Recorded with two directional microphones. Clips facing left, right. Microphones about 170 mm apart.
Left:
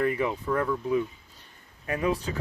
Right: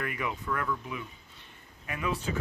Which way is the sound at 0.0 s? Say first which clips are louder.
Left 8 dB; 30° left (ahead or behind).